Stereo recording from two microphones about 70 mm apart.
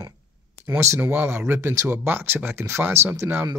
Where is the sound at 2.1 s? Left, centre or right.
Right.